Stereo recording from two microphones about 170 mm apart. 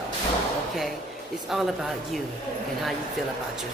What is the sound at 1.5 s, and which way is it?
Speech, centre (ahead or behind).